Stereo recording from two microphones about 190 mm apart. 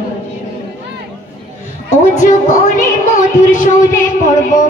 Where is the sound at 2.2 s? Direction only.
45° left (ahead or behind).